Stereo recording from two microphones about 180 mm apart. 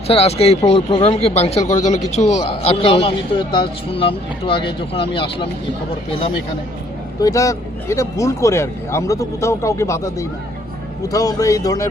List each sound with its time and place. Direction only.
0.1 s a man's voice: 35° left (ahead or behind)
7.2 s a man's voice: 20° left (ahead or behind)